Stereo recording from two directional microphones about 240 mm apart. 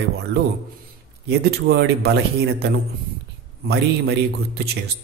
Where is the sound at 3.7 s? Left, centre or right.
Right.